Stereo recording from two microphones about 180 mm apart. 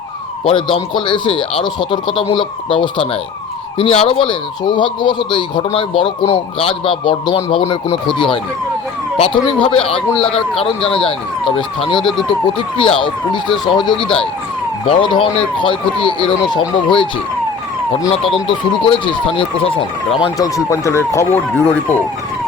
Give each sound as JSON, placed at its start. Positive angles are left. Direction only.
{"t": 0.4, "sound": "speech", "side_deg": 30}
{"t": 10.2, "sound": "speech", "side_deg": 5}
{"t": 10.6, "sound": "speech", "side_deg": 30}
{"t": 13.9, "sound": "speech", "side_deg": 5}
{"t": 14.8, "sound": "speech", "side_deg": 30}
{"t": 19.0, "sound": "speech", "side_deg": 30}
{"t": 20.2, "sound": "speech", "side_deg": 20}